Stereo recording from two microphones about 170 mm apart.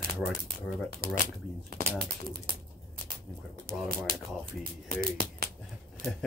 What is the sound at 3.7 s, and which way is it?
Speech, 55° right (ahead or behind).